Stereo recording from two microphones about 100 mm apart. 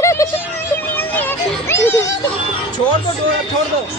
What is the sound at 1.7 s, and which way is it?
Speech, 30° left (ahead or behind).